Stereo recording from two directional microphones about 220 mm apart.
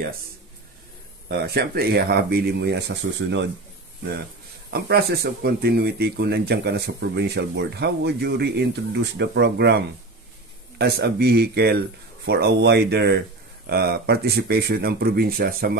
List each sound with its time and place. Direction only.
1.3 s speech: 45° right (ahead or behind)
4.6 s speech: 45° right (ahead or behind)